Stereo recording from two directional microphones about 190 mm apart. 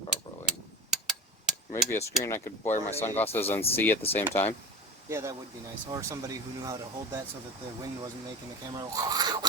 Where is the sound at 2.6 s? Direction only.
35° left (ahead or behind).